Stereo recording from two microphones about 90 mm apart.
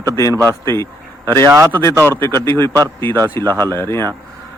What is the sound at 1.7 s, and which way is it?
Speech, 25° left (ahead or behind).